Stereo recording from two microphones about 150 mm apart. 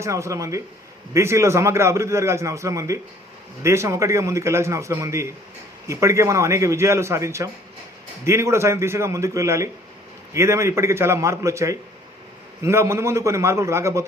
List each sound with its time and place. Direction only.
0.0 s a man's voice: 20° right (ahead or behind)